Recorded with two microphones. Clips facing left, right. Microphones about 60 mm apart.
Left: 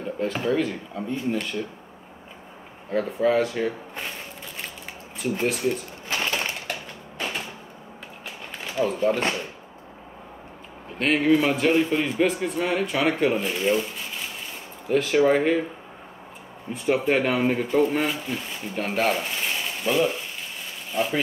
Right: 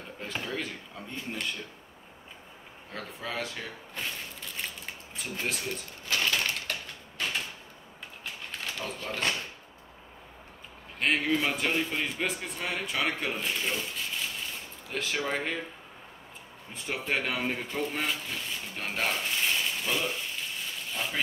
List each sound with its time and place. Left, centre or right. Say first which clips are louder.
0.4 s speech: left 10 dB; centre
2.9 s speech: left 16 dB; centre
5.2 s a sound: left 10 dB; centre
8.5 s speech: left 12 dB; centre
11.1 s speech: left 8 dB; centre
14.9 s speech: left 13 dB; centre
16.7 s speech: left 10 dB; centre